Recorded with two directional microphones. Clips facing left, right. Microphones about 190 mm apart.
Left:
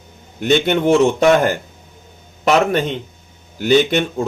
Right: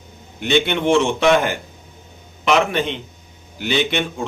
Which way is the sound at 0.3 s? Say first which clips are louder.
Left 3 dB; 45° left (ahead or behind).